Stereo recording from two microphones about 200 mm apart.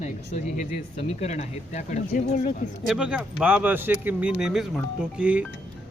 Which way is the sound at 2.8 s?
5° right (ahead or behind).